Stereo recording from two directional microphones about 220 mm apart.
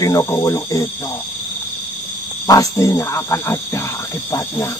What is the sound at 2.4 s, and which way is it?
Speech, 15° left (ahead or behind).